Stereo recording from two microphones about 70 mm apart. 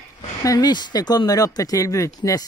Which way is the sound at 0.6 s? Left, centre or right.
Left.